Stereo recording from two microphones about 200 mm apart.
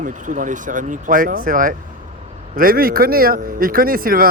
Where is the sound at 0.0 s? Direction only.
40° right (ahead or behind).